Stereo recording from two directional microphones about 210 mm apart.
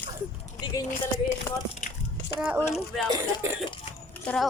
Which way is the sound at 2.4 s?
5° right (ahead or behind).